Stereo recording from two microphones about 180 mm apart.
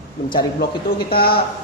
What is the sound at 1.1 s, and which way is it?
Speech, 55° left (ahead or behind).